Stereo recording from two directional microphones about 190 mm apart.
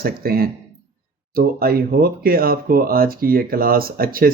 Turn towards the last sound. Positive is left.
turn(degrees=-50)  # may be behind; listen again after turning